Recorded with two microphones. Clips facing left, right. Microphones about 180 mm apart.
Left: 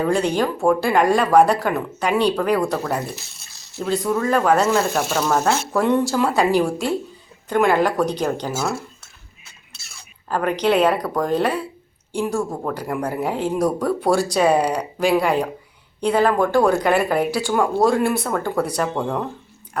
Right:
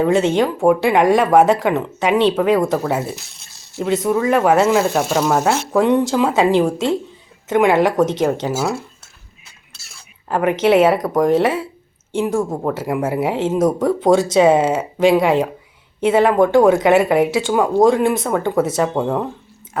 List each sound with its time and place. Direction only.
0.0 s speech: 25° right (ahead or behind)
10.2 s speech: 20° right (ahead or behind)
13.0 s speech: 5° right (ahead or behind)
13.2 s speech: 25° right (ahead or behind)